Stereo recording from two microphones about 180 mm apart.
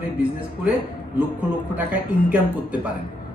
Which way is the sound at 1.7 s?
10° right (ahead or behind).